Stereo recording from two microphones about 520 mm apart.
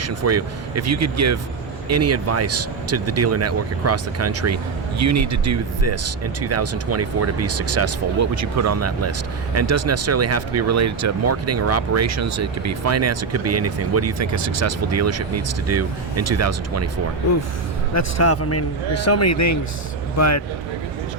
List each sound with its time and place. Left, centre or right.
0.0 s speech: right
17.9 s a man's voice: left